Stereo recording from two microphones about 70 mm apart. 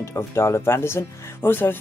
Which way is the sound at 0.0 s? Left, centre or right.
Left.